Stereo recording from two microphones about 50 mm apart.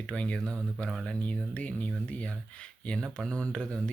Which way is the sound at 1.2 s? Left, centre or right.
Left.